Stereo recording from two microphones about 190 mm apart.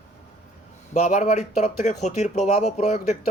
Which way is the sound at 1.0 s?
40° left (ahead or behind).